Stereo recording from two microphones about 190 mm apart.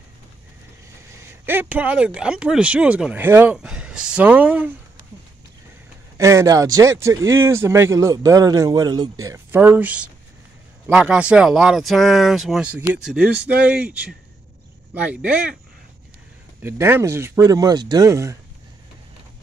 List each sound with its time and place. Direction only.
1.4 s speech: 10° right (ahead or behind)
6.1 s speech: 15° right (ahead or behind)
16.6 s speech: 10° right (ahead or behind)